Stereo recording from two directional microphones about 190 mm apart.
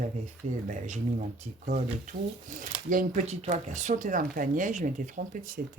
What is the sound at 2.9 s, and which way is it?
Speech, 45° right (ahead or behind).